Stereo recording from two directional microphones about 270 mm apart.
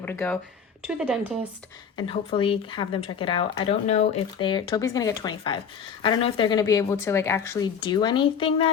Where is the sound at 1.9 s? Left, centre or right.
Centre.